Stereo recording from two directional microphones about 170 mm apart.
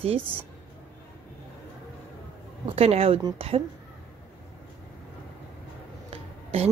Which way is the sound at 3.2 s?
25° right (ahead or behind).